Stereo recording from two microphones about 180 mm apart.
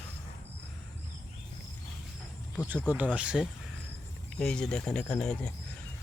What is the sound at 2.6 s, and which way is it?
Speech, 10° right (ahead or behind).